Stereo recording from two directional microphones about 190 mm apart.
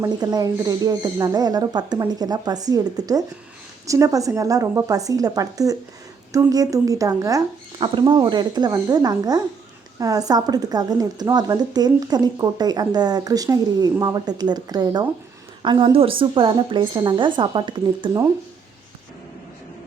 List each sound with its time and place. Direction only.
0.0 s a woman's voice: 20° right (ahead or behind)